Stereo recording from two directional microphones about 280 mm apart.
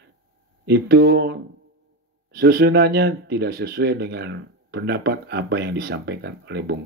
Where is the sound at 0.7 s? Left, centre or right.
Right.